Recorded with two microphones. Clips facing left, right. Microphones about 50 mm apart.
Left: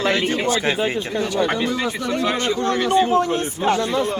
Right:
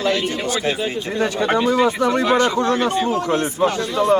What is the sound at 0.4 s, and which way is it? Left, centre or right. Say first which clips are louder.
Speech: left 1 dB; left.